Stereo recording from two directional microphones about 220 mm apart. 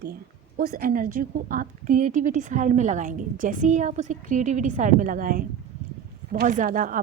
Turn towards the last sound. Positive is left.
turn(degrees=-35)  # may be behind; listen again after turning